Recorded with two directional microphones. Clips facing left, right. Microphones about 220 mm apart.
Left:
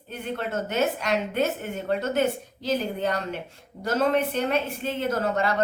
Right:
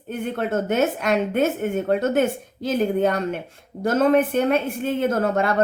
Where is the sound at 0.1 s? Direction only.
50° right (ahead or behind).